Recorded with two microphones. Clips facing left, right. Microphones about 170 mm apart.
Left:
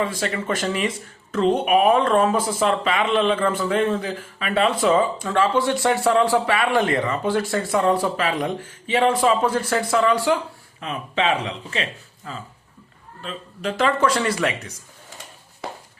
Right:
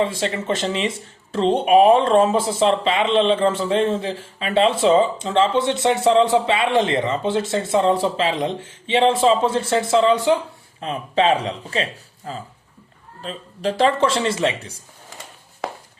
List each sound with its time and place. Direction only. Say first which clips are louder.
0.0 s speech: right 2 dB; 25° right (ahead or behind)
10.8 s speech: right 4 dB; 35° right (ahead or behind)